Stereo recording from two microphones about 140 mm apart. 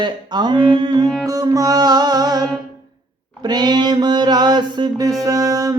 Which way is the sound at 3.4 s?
30° right (ahead or behind).